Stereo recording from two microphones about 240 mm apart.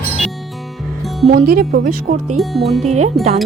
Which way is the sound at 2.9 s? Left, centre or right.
Right.